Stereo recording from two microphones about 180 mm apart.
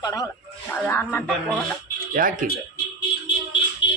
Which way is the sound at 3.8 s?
25° left (ahead or behind).